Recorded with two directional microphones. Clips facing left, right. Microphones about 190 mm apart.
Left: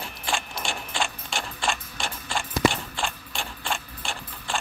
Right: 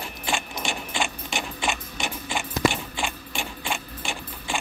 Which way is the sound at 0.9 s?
5° right (ahead or behind).